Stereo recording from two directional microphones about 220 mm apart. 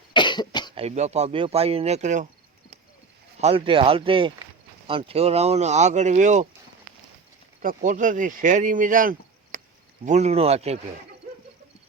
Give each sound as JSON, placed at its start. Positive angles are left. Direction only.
{"t": 0.1, "sound": "cough", "side_deg": 20}
{"t": 0.8, "sound": "speech", "side_deg": -30}
{"t": 3.4, "sound": "speech", "side_deg": -25}
{"t": 7.6, "sound": "speech", "side_deg": -35}